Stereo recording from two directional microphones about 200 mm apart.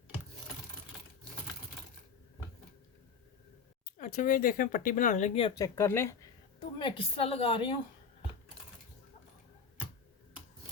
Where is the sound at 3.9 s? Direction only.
40° left (ahead or behind).